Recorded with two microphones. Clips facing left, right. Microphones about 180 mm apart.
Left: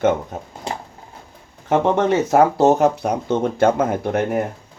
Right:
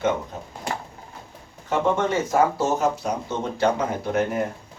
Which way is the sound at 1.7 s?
70° left (ahead or behind).